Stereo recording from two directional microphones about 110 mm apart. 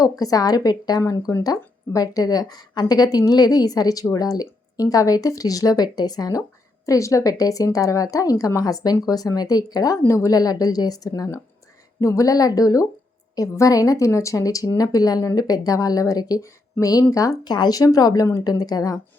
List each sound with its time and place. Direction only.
0.0 s speech: 35° left (ahead or behind)
10.0 s speech: 25° left (ahead or behind)